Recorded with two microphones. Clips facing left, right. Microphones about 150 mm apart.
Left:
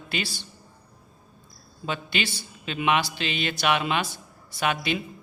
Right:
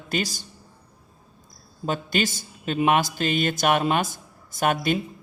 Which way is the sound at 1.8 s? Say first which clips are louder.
Right 4 dB; 45° right (ahead or behind).